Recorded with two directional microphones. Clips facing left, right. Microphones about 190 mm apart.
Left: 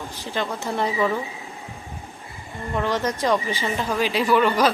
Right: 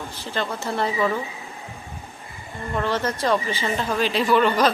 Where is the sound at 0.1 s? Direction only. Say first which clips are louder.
Left 1 dB; 15° left (ahead or behind).